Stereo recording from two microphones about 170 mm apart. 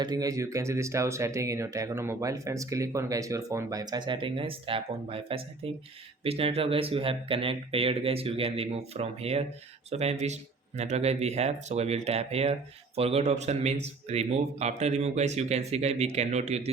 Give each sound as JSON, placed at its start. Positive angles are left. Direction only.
{"t": 0.0, "sound": "speech", "side_deg": -20}